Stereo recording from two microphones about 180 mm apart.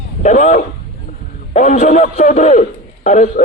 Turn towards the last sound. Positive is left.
turn(degrees=40)  # may be behind; listen again after turning